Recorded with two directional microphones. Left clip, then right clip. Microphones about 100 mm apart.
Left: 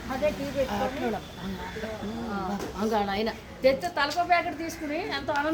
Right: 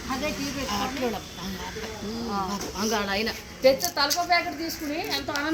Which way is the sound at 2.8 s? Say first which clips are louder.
Even; 15° left (ahead or behind).